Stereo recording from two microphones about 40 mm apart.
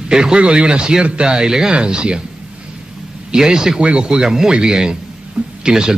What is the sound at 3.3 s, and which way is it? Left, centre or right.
A man's voice, centre.